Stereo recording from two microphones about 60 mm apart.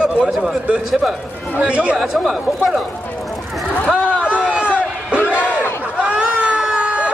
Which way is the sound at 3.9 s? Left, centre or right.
Centre.